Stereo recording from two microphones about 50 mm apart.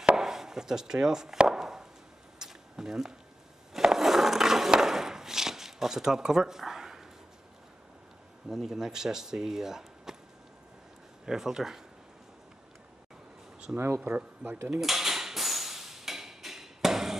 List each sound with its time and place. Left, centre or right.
0.0 s chop: centre
2.3 s a sound: centre
3.7 s skateboard: centre
8.5 s speech: centre
11.2 s speech: centre
13.7 s speech: right
14.0 s speech: right
14.8 s dishes: centre